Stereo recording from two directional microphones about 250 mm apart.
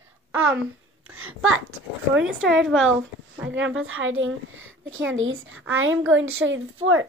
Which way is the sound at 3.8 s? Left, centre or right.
Right.